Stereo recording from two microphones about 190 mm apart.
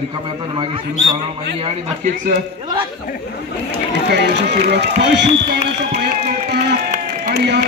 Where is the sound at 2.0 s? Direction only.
45° right (ahead or behind).